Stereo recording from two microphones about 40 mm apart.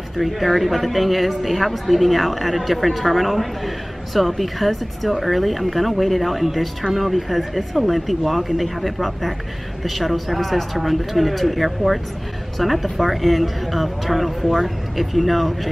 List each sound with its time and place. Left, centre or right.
0.2 s a woman's voice: centre